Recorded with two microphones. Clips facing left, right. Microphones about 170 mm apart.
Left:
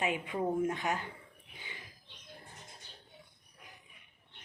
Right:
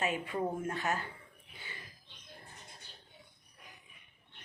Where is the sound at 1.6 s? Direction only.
15° left (ahead or behind).